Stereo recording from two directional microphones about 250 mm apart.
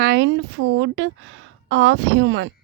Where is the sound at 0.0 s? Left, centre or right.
Right.